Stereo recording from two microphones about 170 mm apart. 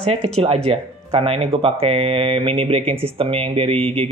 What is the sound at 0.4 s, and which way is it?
Speech, 35° right (ahead or behind).